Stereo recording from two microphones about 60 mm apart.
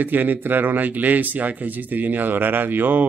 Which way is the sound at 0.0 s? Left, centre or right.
Right.